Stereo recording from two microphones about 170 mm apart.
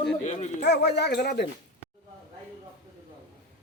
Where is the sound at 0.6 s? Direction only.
75° left (ahead or behind).